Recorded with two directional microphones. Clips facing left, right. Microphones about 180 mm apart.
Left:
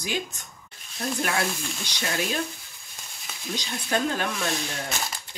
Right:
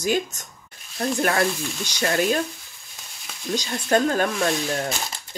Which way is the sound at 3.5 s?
45° right (ahead or behind).